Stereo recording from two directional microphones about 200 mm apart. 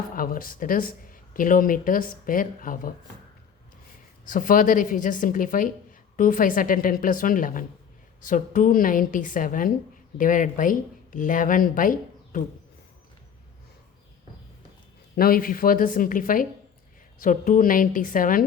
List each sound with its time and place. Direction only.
0.2 s speech: 45° left (ahead or behind)
4.3 s speech: 40° left (ahead or behind)
15.1 s speech: 50° left (ahead or behind)